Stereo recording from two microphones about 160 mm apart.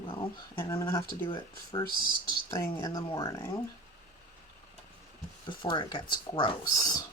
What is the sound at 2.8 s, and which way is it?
Speech, 20° left (ahead or behind).